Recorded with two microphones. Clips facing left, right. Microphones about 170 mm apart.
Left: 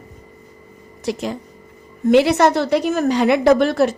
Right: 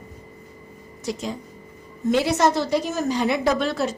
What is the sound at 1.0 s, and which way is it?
A woman's voice, 65° left (ahead or behind).